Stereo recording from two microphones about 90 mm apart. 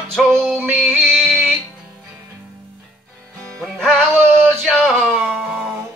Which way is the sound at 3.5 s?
5° left (ahead or behind).